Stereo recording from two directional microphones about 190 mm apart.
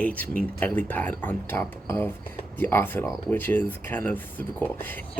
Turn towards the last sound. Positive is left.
turn(degrees=10)  # may be behind; listen again after turning